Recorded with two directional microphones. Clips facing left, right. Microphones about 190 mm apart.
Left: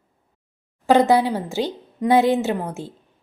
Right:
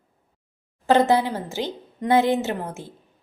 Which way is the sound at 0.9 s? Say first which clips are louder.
Left 2 dB; 15° left (ahead or behind).